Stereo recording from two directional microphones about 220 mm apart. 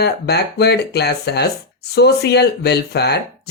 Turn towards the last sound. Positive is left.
turn(degrees=45)  # may be behind; listen again after turning